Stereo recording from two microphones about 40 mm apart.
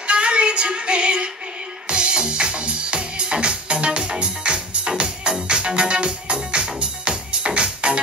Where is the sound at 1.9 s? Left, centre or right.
Right.